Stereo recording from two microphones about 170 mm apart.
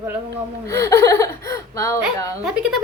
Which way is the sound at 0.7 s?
20° left (ahead or behind).